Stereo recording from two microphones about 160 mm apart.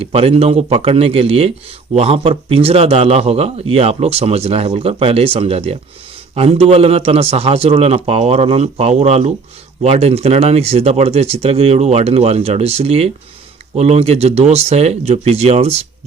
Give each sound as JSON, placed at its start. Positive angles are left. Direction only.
{"t": 0.0, "sound": "a man's voice", "side_deg": -40}